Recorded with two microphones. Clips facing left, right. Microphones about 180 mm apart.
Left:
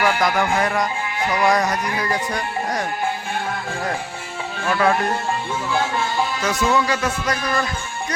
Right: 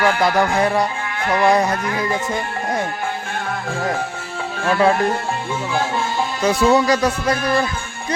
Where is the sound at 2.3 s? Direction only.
25° right (ahead or behind).